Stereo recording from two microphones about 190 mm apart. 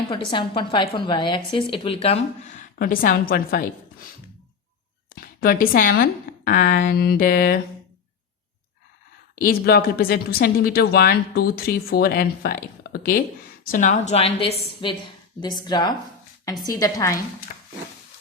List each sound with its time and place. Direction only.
0.1 s a woman's voice: 25° left (ahead or behind)
2.7 s speech: 50° left (ahead or behind)
5.1 s a woman's voice: 50° left (ahead or behind)
9.3 s a woman's voice: 50° left (ahead or behind); by 17.2 s 15° left (ahead or behind)